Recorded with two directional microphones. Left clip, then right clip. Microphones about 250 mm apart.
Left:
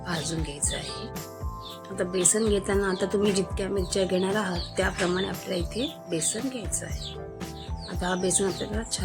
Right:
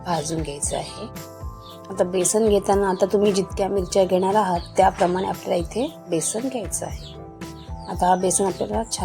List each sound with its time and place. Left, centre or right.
0.0 s speech: centre
2.0 s speech: centre
8.0 s speech: centre